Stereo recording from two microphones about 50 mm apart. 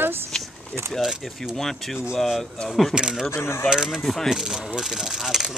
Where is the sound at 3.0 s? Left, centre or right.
Centre.